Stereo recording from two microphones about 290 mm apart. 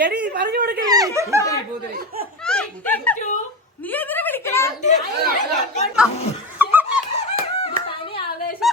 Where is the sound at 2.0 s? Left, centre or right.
Right.